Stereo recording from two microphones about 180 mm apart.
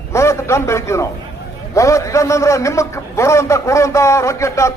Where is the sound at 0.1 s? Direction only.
15° left (ahead or behind).